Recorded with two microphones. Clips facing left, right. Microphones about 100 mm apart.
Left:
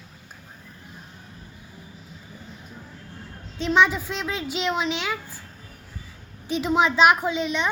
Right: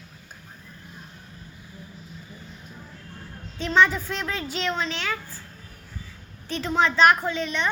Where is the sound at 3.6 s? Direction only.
Centre (ahead or behind).